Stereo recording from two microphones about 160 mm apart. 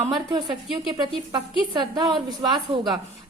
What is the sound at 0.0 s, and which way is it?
A woman's voice, 25° right (ahead or behind).